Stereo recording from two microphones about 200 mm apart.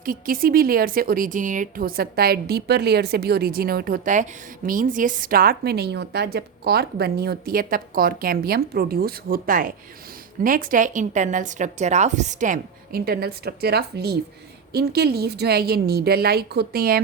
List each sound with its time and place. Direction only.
0.0 s a woman's voice: 45° right (ahead or behind)